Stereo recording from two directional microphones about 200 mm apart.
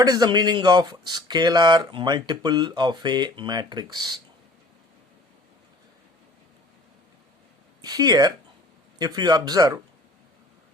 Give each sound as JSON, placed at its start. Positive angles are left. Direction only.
{"t": 0.0, "sound": "speech", "side_deg": -20}
{"t": 7.9, "sound": "speech", "side_deg": -20}